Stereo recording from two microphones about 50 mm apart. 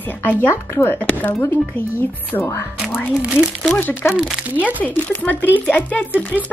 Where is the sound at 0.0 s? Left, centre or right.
Left.